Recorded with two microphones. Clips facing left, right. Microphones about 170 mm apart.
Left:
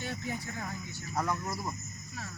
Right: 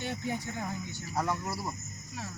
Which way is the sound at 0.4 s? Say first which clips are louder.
Right 3 dB; 20° right (ahead or behind).